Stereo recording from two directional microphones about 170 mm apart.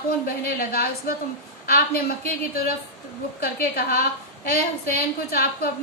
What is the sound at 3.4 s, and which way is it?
A woman's voice, 65° left (ahead or behind).